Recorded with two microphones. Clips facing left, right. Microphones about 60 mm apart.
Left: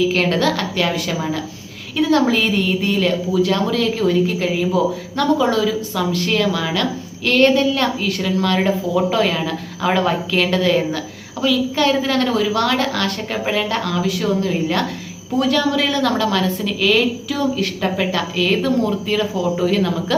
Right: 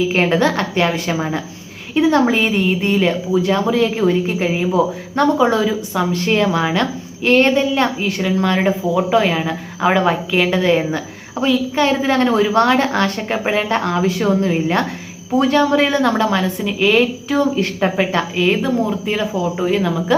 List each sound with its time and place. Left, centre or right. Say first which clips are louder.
0.0 s a woman's voice: right 2 dB; right